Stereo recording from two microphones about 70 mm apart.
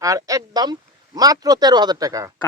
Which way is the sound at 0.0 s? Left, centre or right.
Right.